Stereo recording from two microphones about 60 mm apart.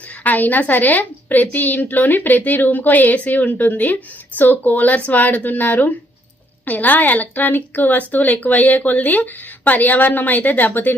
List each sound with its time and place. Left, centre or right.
0.2 s a woman's voice: left